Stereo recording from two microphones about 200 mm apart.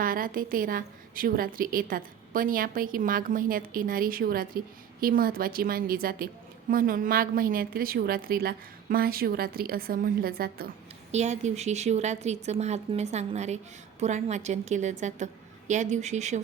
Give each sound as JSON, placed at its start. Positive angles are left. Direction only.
{"t": 0.0, "sound": "a woman's voice", "side_deg": -45}
{"t": 11.1, "sound": "a woman's voice", "side_deg": -35}